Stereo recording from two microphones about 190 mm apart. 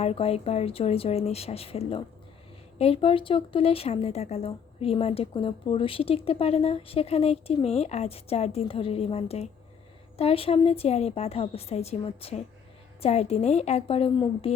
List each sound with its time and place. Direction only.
0.0 s speech: 30° left (ahead or behind)